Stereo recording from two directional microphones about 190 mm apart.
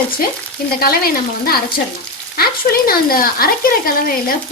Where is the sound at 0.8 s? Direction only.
50° left (ahead or behind).